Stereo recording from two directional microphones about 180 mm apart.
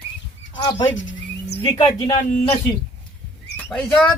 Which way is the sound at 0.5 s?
25° left (ahead or behind).